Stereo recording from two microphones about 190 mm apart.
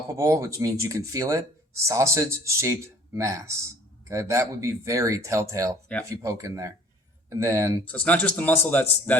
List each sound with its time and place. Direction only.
0.1 s speech: 15° right (ahead or behind)
7.9 s speech: 5° left (ahead or behind)